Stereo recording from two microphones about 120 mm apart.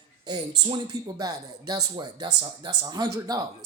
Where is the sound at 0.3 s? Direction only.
40° right (ahead or behind).